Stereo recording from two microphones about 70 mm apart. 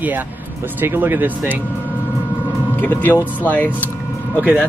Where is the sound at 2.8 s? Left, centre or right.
Left.